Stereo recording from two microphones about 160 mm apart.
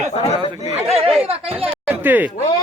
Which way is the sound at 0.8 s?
40° right (ahead or behind).